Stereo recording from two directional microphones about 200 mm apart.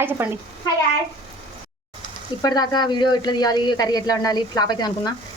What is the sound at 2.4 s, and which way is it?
Speech, 20° left (ahead or behind).